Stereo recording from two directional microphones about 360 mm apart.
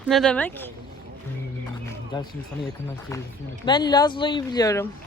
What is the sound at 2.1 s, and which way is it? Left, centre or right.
Speech, centre.